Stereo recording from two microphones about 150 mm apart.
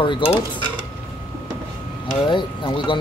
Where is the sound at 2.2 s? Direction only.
30° left (ahead or behind).